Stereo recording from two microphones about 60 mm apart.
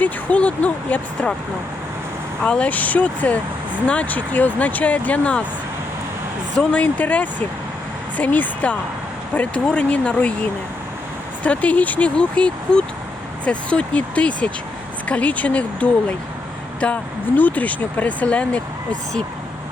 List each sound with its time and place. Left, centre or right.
0.0 s speech: left
2.4 s speech: centre
6.6 s speech: left
11.4 s speech: left